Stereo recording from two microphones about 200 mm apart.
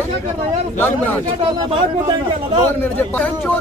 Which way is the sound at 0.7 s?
10° left (ahead or behind).